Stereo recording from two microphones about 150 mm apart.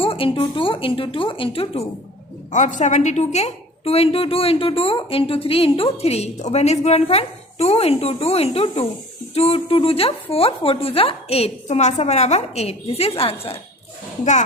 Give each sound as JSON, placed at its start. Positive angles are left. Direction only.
{"t": 0.0, "sound": "a woman's voice", "side_deg": 35}
{"t": 2.5, "sound": "a woman's voice", "side_deg": 55}